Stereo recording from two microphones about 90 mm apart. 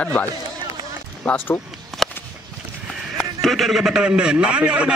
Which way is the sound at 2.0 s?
5° left (ahead or behind).